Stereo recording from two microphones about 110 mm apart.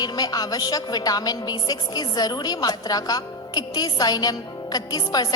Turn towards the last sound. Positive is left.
turn(degrees=35)  # may be behind; listen again after turning